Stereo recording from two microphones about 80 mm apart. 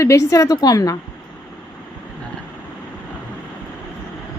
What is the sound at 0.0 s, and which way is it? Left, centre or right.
Speech, left.